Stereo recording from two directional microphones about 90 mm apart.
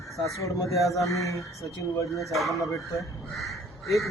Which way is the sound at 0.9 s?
35° left (ahead or behind).